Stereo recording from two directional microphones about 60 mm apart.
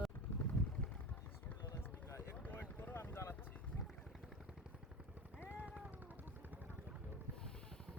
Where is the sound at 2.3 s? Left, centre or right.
Left.